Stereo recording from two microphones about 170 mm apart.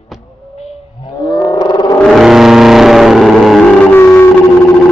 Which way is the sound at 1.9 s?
Centre (ahead or behind).